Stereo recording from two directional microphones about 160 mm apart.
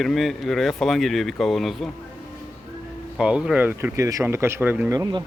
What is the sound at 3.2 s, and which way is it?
Speech, 5° right (ahead or behind).